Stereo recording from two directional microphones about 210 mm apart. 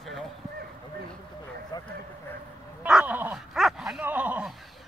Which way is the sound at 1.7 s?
20° left (ahead or behind).